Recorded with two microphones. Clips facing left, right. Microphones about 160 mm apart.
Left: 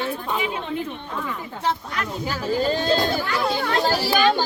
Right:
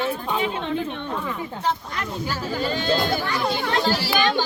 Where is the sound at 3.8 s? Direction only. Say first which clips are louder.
Left 4 dB; 40° left (ahead or behind).